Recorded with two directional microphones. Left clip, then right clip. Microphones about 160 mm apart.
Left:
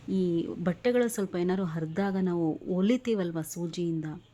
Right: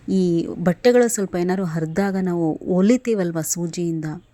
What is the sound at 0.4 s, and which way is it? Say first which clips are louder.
Speech: right 11 dB; 35° right (ahead or behind).